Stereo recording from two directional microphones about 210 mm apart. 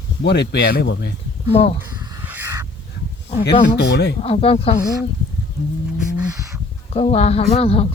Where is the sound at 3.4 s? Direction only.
50° left (ahead or behind).